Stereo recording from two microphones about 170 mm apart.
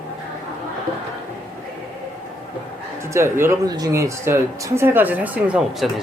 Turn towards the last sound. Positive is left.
turn(degrees=-5)  # may be behind; listen again after turning